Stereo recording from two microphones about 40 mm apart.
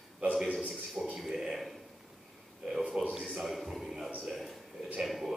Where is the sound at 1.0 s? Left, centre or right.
Centre.